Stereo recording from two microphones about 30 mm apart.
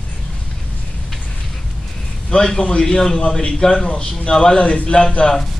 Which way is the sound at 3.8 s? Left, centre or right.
Left.